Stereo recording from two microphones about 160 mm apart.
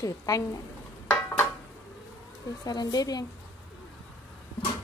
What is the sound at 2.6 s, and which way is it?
Speech, 25° left (ahead or behind).